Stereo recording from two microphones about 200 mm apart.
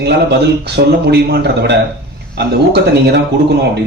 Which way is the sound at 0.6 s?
55° right (ahead or behind).